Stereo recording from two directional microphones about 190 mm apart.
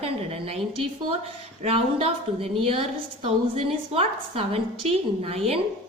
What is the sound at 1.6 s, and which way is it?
A woman's voice, 30° right (ahead or behind).